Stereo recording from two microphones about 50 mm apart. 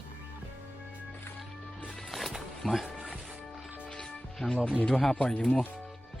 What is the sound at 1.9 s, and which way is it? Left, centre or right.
Music, centre.